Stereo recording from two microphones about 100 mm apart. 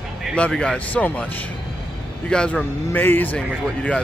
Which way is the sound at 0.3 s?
10° left (ahead or behind).